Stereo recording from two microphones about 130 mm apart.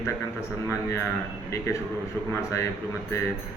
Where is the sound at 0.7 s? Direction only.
20° left (ahead or behind).